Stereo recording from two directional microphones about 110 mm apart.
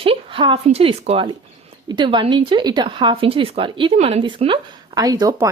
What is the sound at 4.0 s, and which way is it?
Speech, 75° right (ahead or behind).